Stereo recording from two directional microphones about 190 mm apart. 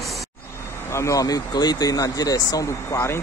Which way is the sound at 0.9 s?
15° left (ahead or behind).